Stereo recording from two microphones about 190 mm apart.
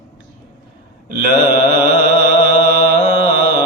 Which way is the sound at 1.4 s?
50° right (ahead or behind).